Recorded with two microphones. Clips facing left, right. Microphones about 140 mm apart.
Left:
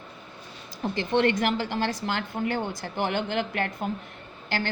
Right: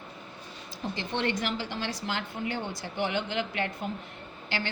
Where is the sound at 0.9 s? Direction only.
60° left (ahead or behind).